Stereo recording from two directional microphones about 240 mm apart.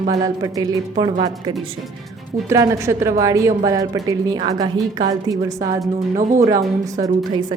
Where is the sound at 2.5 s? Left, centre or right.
Centre.